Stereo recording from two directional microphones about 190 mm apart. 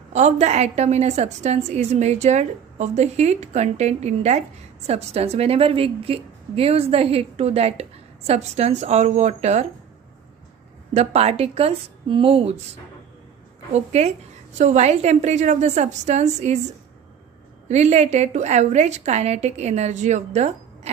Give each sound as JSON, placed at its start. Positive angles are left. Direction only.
{"t": 0.1, "sound": "a woman's voice", "side_deg": -35}
{"t": 10.9, "sound": "a woman's voice", "side_deg": -35}
{"t": 13.7, "sound": "a woman's voice", "side_deg": -35}
{"t": 17.7, "sound": "a woman's voice", "side_deg": -35}